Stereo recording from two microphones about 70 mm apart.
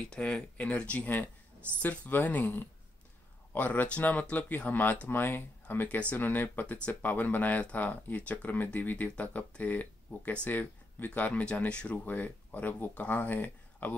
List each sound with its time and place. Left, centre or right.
0.1 s speech: centre